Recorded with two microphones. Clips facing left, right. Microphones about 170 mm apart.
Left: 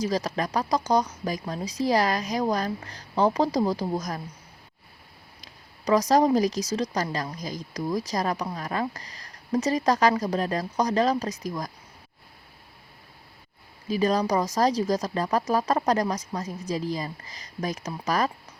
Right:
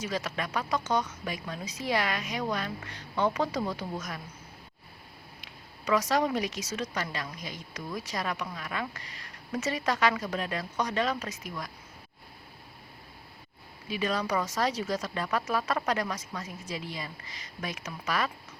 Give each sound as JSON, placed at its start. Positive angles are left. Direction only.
{"t": 0.0, "sound": "speech", "side_deg": 35}
{"t": 5.4, "sound": "speech", "side_deg": 40}
{"t": 13.8, "sound": "speech", "side_deg": 40}